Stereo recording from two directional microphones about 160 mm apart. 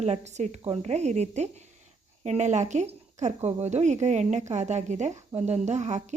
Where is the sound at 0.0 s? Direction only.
45° right (ahead or behind).